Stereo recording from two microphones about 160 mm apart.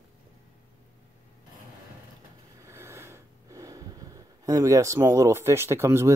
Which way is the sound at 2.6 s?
15° right (ahead or behind).